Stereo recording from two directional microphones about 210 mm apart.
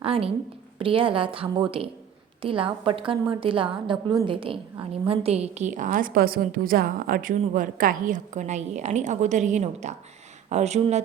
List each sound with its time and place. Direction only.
0.0 s a woman's voice: 25° right (ahead or behind)